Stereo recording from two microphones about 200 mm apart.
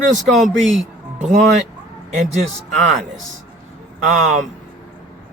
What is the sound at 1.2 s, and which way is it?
Speech, 35° right (ahead or behind).